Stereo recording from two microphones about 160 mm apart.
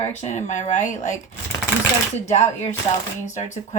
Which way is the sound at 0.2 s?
45° left (ahead or behind).